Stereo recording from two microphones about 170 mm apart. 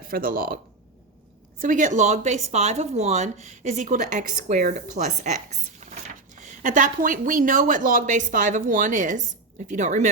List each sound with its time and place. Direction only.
0.1 s a woman's voice: 60° right (ahead or behind)